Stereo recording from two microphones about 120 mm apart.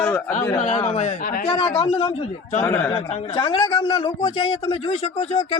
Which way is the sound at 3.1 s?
55° left (ahead or behind).